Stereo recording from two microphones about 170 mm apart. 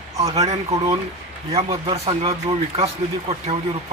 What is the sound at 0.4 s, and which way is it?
Speech, 40° right (ahead or behind).